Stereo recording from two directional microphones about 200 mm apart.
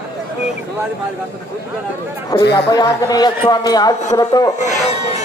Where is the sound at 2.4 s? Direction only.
55° left (ahead or behind).